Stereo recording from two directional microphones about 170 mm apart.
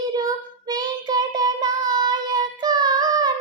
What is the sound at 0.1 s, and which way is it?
Child singing, 25° right (ahead or behind).